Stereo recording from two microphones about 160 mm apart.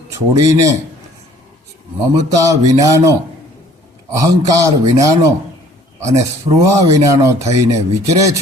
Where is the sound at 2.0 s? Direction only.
20° right (ahead or behind).